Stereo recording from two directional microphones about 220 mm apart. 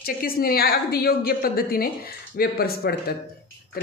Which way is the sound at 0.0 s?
40° left (ahead or behind).